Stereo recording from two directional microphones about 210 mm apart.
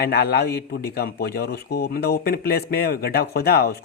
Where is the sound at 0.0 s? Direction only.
50° left (ahead or behind).